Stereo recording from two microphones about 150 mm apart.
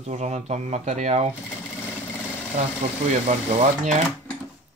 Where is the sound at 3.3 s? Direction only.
45° right (ahead or behind).